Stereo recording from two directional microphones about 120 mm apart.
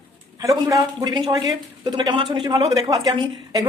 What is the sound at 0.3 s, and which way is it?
A woman's voice, 30° right (ahead or behind).